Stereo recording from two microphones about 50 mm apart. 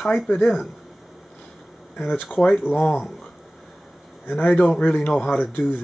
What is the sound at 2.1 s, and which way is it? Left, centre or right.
Speech, left.